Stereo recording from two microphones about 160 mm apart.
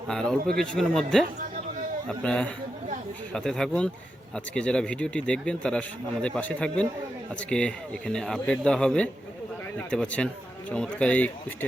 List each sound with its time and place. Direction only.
0.1 s speech: 5° left (ahead or behind)